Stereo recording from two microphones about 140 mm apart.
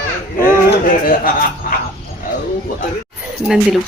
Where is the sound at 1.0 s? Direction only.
90° left.